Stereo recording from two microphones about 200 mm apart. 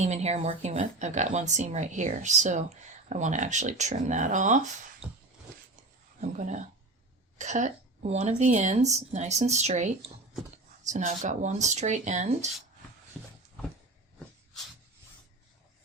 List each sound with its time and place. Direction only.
0.0 s speech: 35° right (ahead or behind)
6.1 s speech: 40° right (ahead or behind)
13.2 s a sound: centre (ahead or behind)